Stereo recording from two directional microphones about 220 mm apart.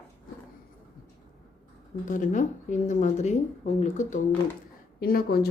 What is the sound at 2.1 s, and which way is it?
Speech, 35° left (ahead or behind).